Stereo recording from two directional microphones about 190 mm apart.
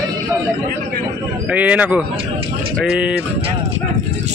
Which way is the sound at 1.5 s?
10° right (ahead or behind).